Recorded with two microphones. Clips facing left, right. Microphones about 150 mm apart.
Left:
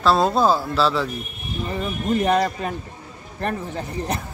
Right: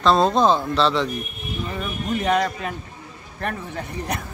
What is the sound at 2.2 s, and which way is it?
Speech, 35° left (ahead or behind).